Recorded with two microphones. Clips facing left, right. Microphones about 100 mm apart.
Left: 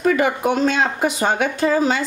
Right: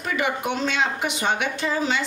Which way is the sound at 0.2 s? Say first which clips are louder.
Left 7 dB; 40° left (ahead or behind).